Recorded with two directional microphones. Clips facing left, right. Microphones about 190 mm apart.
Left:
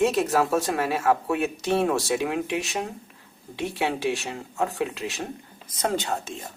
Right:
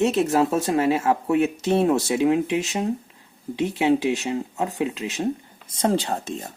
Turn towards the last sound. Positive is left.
turn(degrees=-35)  # may be behind; listen again after turning